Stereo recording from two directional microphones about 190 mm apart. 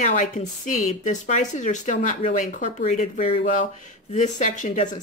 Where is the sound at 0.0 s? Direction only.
40° left (ahead or behind).